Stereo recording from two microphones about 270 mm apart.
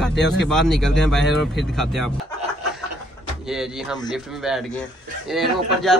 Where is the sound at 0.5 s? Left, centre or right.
Centre.